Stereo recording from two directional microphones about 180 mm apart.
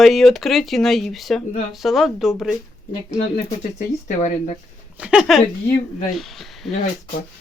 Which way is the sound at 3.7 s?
40° left (ahead or behind).